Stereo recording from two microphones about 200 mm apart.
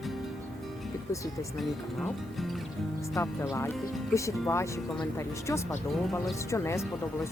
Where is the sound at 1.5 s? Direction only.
Centre (ahead or behind).